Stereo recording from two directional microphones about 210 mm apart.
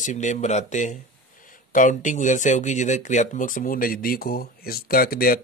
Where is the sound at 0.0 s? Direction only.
35° left (ahead or behind).